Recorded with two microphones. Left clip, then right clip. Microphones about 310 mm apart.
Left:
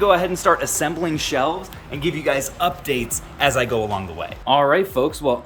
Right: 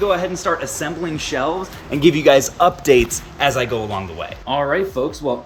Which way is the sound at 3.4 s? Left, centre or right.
Centre.